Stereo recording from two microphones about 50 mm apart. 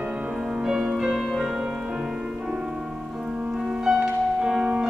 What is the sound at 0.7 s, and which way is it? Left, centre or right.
Music, centre.